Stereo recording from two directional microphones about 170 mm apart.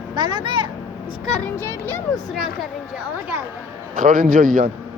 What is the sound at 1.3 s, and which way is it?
Speech, 5° left (ahead or behind).